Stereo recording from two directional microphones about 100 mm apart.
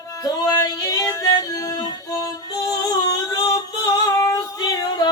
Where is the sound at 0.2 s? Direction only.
40° left (ahead or behind).